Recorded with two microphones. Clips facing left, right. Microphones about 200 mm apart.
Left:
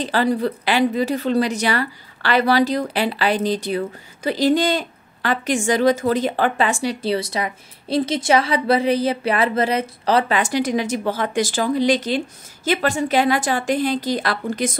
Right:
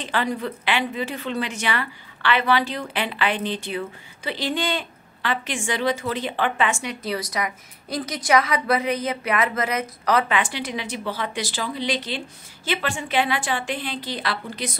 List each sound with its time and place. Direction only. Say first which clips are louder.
0.0 s a woman's voice: left 6 dB; 35° left (ahead or behind)